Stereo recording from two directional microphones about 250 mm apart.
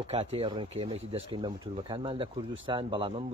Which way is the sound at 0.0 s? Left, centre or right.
Right.